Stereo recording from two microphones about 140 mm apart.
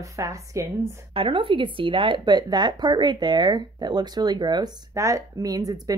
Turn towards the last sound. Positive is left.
turn(degrees=-25)  # may be behind; listen again after turning